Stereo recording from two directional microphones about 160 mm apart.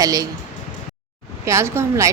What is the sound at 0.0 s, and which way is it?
Speech, 25° right (ahead or behind).